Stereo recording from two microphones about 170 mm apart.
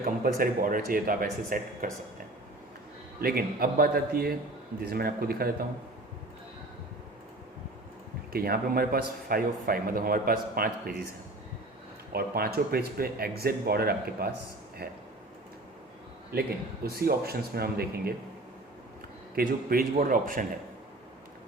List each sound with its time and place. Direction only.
0.0 s speech: 55° right (ahead or behind)
3.2 s speech: 60° right (ahead or behind)
8.3 s speech: 60° right (ahead or behind)
12.1 s speech: 65° right (ahead or behind)
16.3 s speech: 65° right (ahead or behind)
19.4 s a man's voice: 60° right (ahead or behind)